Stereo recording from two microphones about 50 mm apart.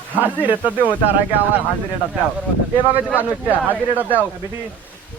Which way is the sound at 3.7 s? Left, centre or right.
Right.